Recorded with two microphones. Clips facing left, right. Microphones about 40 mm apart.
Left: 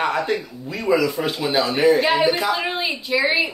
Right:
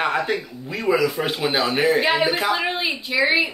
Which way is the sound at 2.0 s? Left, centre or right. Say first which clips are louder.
Left 1 dB; centre.